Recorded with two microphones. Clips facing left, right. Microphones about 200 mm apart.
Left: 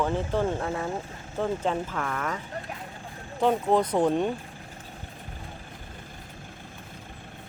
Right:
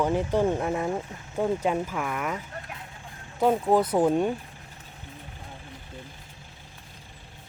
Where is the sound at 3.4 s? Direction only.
5° right (ahead or behind).